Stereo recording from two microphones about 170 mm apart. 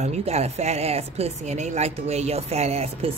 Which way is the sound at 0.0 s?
40° right (ahead or behind).